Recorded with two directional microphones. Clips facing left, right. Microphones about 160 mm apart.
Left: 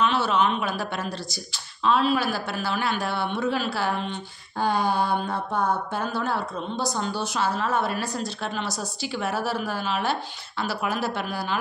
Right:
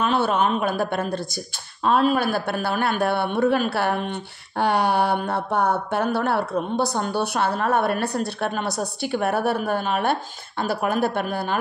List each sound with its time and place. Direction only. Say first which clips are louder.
0.0 s speech: right 2 dB; 50° right (ahead or behind)